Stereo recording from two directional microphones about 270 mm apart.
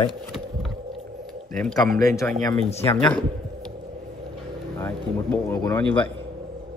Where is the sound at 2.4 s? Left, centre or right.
Centre.